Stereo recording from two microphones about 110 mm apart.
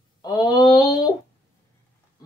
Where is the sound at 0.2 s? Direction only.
40° left (ahead or behind).